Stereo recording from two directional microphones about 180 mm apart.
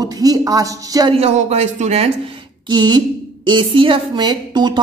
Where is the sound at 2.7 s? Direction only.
25° right (ahead or behind).